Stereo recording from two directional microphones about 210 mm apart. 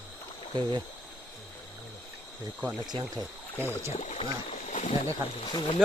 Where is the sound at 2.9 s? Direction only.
20° right (ahead or behind).